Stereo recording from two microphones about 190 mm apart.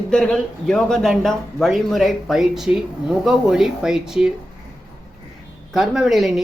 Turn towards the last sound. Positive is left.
turn(degrees=0)  # may be behind; listen again after turning